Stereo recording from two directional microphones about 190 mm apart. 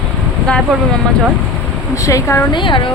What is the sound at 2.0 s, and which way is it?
Speech, 15° left (ahead or behind).